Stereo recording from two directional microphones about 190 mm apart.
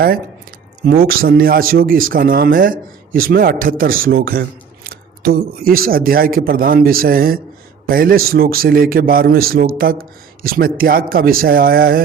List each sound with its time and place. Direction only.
0.9 s speech: 50° right (ahead or behind)